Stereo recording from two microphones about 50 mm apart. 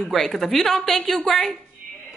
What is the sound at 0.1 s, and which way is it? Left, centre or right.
A woman's voice, centre.